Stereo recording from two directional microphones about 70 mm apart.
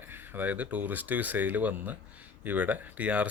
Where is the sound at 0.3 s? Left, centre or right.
Right.